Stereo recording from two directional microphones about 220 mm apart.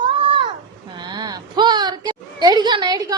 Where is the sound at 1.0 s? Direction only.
20° right (ahead or behind).